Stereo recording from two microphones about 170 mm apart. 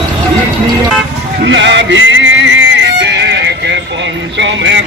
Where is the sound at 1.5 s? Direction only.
90° right.